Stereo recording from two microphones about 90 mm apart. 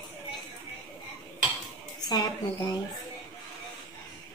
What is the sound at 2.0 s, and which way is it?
Speech, 50° left (ahead or behind).